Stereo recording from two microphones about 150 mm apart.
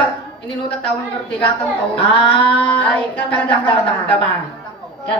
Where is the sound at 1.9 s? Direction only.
35° left (ahead or behind).